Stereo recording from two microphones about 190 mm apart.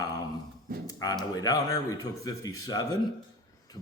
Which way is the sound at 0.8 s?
20° left (ahead or behind).